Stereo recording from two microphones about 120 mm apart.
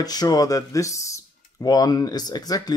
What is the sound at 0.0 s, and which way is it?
Speech, 35° left (ahead or behind).